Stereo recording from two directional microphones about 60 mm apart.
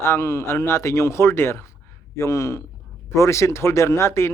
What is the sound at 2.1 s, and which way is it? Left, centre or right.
A man's voice, left.